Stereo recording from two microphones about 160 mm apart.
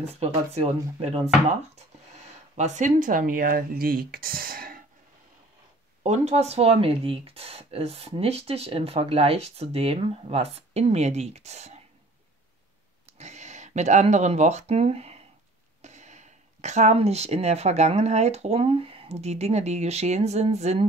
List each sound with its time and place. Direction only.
0.0 s speech: 40° right (ahead or behind)
2.1 s speech: 50° right (ahead or behind); by 4.8 s 65° right (ahead or behind)
6.0 s speech: 45° right (ahead or behind)
13.0 s speech: 45° right (ahead or behind)